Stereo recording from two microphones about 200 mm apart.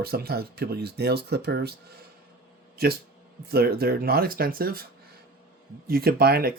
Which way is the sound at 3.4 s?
50° right (ahead or behind).